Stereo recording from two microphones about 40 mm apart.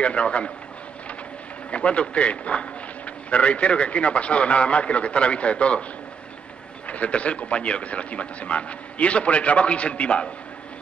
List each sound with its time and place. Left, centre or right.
0.0 s a man's voice: left
1.7 s a man's voice: left
6.9 s a man's voice: left